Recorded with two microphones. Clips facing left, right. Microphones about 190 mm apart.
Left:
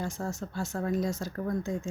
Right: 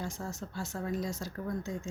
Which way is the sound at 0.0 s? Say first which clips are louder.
Left 4 dB; 50° left (ahead or behind).